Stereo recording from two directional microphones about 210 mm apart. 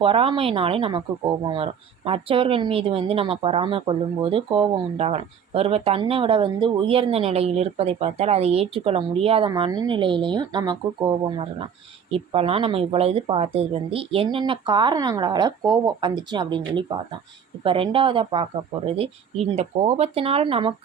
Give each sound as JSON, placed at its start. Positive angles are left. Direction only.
{"t": 0.0, "sound": "speech", "side_deg": -25}